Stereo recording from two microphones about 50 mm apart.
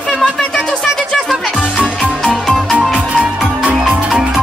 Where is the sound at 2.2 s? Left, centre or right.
Centre.